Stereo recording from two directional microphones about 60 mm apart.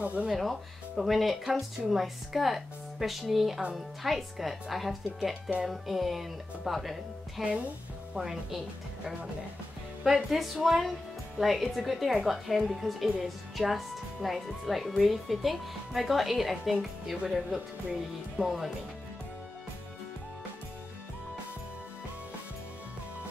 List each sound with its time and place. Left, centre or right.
0.0 s speech: right
0.4 s speech: centre
10.0 s speech: centre